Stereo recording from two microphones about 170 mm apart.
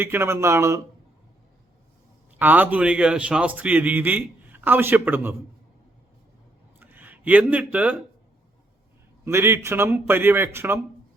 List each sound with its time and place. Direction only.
0.0 s a man's voice: 15° right (ahead or behind)
2.4 s a man's voice: 10° right (ahead or behind)
6.7 s a sound: 10° right (ahead or behind)
9.2 s a man's voice: 15° right (ahead or behind)